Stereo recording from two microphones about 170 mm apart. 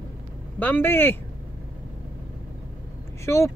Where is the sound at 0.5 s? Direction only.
10° left (ahead or behind).